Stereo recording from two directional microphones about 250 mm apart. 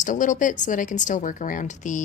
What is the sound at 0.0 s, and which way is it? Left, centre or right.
Speech, left.